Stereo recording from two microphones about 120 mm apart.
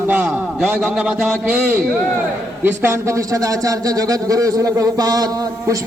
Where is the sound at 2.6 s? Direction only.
20° right (ahead or behind).